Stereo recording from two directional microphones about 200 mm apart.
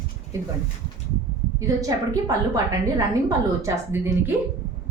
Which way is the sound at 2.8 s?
15° right (ahead or behind).